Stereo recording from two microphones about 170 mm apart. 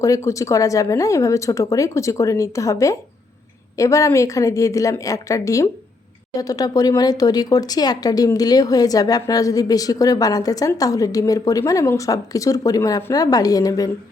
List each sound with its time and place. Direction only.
0.0 s speech: 20° left (ahead or behind)